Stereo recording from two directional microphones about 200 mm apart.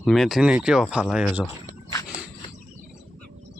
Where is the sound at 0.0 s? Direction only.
Centre (ahead or behind).